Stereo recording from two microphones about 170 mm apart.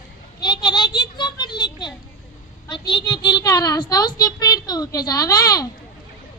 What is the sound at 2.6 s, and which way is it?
A child's voice, 30° left (ahead or behind).